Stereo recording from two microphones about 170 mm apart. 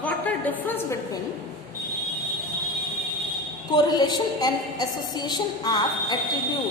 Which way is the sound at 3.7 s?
25° left (ahead or behind).